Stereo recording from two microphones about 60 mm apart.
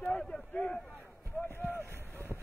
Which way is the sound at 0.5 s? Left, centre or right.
Left.